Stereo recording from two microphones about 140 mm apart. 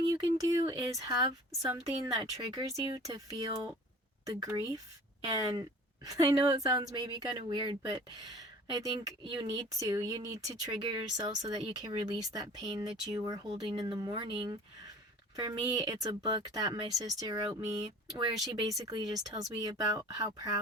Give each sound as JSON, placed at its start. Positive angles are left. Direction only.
{"t": 0.1, "sound": "speech", "side_deg": -25}
{"t": 2.4, "sound": "speech", "side_deg": -30}
{"t": 10.7, "sound": "speech", "side_deg": -35}